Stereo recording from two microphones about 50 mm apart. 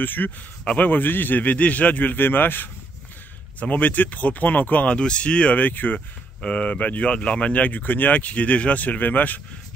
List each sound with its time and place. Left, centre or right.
0.0 s a man's voice: left
3.5 s a man's voice: left
4.8 s speech: left
5.6 s a man's voice: left
5.9 s speech: left